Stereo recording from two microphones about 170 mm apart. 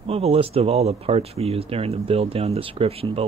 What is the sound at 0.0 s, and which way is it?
Speech, 35° right (ahead or behind).